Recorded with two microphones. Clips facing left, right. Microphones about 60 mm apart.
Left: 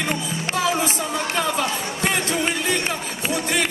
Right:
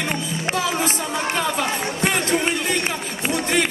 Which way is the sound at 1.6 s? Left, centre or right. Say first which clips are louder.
Right 1 dB; right.